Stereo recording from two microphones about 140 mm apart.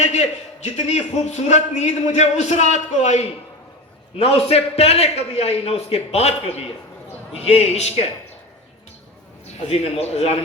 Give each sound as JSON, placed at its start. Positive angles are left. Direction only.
{"t": 0.0, "sound": "a man's voice", "side_deg": 55}
{"t": 9.6, "sound": "a man's voice", "side_deg": 45}